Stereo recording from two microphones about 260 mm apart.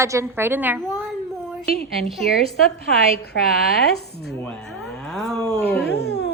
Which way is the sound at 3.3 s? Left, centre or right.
Left.